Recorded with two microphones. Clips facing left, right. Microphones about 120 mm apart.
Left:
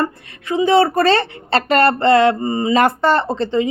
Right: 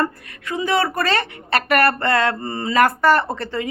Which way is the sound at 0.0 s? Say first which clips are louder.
Left 1 dB; 20° left (ahead or behind).